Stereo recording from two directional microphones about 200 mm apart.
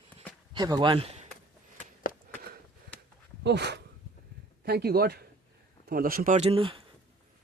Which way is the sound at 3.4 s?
55° right (ahead or behind).